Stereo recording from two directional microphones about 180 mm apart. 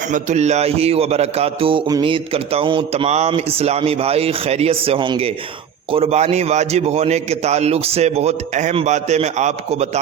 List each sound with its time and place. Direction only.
0.1 s speech: 40° right (ahead or behind)